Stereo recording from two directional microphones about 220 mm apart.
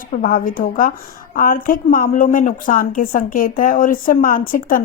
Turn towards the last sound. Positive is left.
turn(degrees=40)  # may be behind; listen again after turning